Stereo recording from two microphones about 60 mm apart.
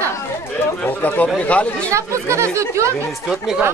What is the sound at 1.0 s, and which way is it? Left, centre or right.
Speech, left.